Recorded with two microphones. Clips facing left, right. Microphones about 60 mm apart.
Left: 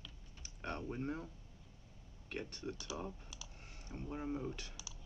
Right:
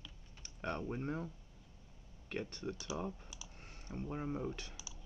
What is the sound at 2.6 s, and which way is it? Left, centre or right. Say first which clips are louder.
Speech: right 3 dB; right.